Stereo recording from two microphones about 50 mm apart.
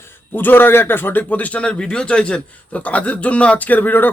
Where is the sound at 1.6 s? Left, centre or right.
Centre; by 4.1 s left.